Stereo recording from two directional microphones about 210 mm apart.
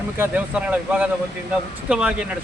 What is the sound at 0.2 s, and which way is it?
Speech, 5° right (ahead or behind).